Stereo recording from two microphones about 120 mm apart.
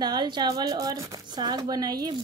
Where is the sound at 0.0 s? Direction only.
35° right (ahead or behind).